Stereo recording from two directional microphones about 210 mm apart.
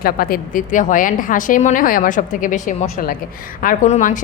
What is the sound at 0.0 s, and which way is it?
A woman's voice, 45° left (ahead or behind).